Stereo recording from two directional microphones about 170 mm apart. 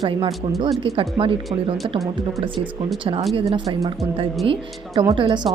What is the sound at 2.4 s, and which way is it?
A woman's voice, 30° right (ahead or behind).